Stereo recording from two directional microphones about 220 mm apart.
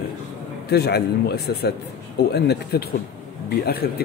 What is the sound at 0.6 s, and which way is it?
A man's voice, 45° left (ahead or behind).